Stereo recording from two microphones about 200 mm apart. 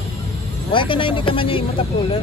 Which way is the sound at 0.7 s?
25° left (ahead or behind).